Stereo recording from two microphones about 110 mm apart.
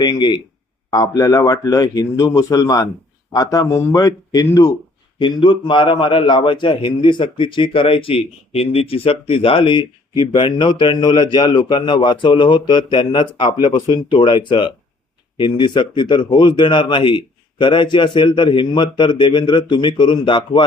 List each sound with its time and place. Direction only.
0.0 s a man's voice: 40° left (ahead or behind)
5.2 s a man's voice: 45° left (ahead or behind)